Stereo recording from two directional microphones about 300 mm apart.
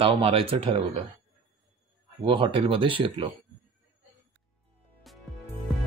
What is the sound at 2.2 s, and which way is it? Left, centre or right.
Speech, centre.